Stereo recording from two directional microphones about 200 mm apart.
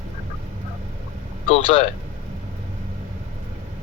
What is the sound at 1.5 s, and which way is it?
Speech, 30° left (ahead or behind).